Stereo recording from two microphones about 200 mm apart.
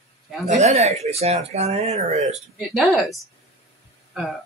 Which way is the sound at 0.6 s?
35° right (ahead or behind).